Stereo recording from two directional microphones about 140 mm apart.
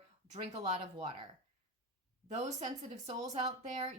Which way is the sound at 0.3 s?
50° right (ahead or behind).